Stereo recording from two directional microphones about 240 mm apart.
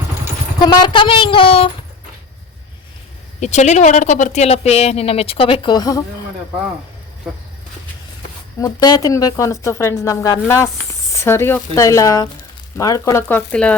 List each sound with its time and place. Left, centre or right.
0.6 s speech: centre
3.4 s speech: left
7.3 s speech: centre
8.6 s a woman's voice: centre